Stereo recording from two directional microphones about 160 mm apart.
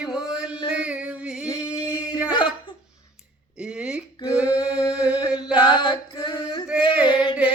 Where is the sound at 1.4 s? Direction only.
25° left (ahead or behind).